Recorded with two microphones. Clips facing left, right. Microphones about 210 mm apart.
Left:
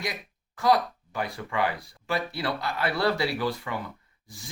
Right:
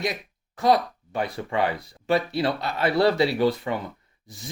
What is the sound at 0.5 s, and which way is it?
Speech, 25° right (ahead or behind).